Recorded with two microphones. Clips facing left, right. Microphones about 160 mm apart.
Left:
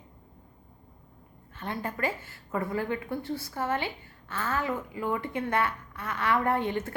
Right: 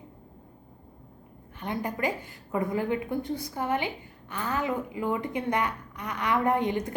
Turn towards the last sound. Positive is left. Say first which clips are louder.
# right 2 dB
turn(degrees=-15)  # may be behind; listen again after turning